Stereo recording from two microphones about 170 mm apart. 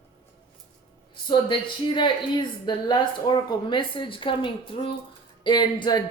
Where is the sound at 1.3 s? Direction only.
30° left (ahead or behind).